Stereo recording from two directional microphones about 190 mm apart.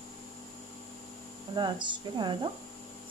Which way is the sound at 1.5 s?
25° right (ahead or behind).